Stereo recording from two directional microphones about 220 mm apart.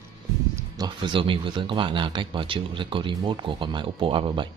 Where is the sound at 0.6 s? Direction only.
20° right (ahead or behind).